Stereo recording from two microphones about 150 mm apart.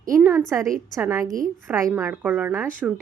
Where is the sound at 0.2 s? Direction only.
10° right (ahead or behind).